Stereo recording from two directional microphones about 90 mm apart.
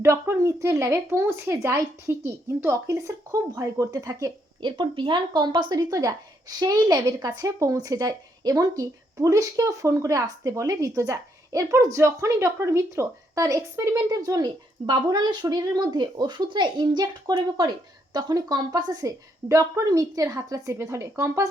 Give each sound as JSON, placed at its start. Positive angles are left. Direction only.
{"t": 0.0, "sound": "speech", "side_deg": -30}
{"t": 4.6, "sound": "speech", "side_deg": -65}